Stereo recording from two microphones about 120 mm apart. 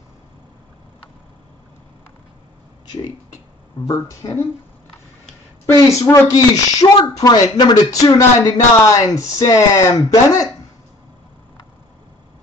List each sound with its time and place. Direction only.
3.8 s speech: 25° left (ahead or behind)
5.7 s speech: 25° left (ahead or behind)